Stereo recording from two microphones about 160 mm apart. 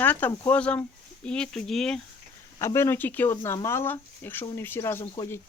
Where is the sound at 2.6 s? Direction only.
15° left (ahead or behind).